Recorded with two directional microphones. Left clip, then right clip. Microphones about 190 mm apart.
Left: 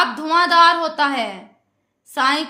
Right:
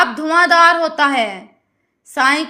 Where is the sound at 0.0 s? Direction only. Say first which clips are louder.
Right 3 dB; 15° right (ahead or behind).